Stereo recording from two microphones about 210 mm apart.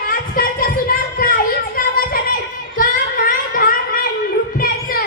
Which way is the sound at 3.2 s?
45° left (ahead or behind).